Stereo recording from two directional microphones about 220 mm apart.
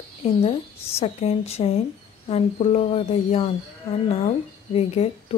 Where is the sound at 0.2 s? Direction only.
25° left (ahead or behind).